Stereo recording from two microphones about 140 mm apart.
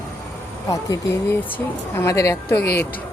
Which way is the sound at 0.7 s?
20° left (ahead or behind).